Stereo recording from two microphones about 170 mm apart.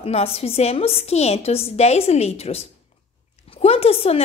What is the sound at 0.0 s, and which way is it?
A woman's voice, 35° left (ahead or behind).